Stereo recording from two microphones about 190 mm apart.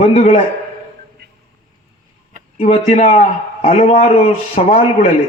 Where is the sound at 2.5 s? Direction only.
35° left (ahead or behind).